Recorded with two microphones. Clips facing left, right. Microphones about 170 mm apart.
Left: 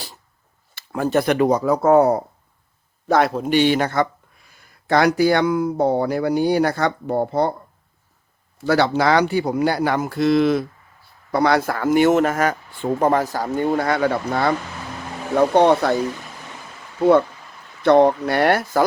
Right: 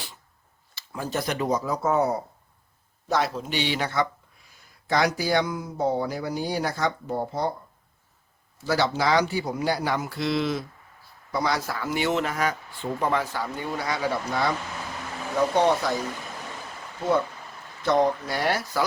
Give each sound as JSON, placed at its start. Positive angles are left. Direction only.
{"t": 0.8, "sound": "speech", "side_deg": 60}
{"t": 8.5, "sound": "speech", "side_deg": 60}
{"t": 17.0, "sound": "speech", "side_deg": 60}